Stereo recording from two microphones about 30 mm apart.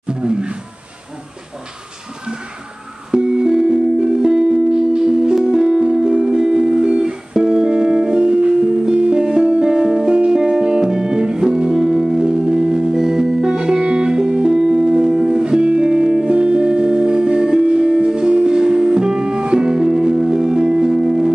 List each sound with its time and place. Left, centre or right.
0.1 s a sound: right
3.1 s music: right
15.4 s music: right